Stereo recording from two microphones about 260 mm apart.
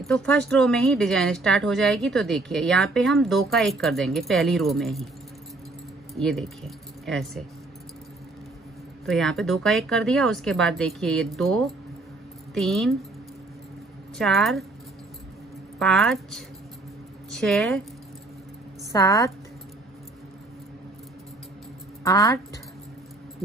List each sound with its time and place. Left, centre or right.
0.0 s speech: centre
6.1 s speech: centre
9.0 s speech: centre
14.1 s speech: centre
15.8 s speech: centre
18.9 s a woman's voice: centre
22.0 s speech: centre